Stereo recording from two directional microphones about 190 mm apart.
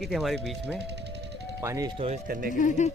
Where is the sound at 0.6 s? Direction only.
65° right (ahead or behind).